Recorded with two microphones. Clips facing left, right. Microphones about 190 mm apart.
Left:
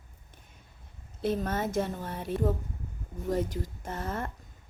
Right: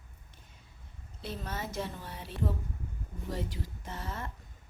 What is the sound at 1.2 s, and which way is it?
A woman's voice, 50° left (ahead or behind).